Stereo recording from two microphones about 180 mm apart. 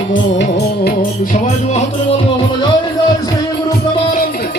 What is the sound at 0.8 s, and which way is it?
Music, 45° left (ahead or behind).